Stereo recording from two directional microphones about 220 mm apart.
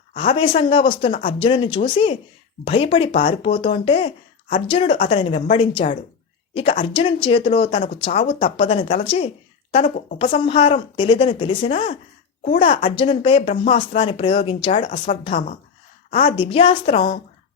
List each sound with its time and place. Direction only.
0.1 s speech: 25° left (ahead or behind)